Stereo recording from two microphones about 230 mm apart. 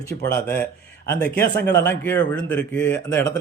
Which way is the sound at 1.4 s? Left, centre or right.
Left.